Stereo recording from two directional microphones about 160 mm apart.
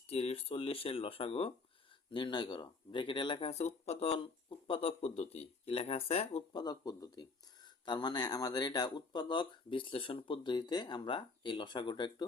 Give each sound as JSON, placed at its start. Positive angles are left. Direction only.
{"t": 0.1, "sound": "speech", "side_deg": 40}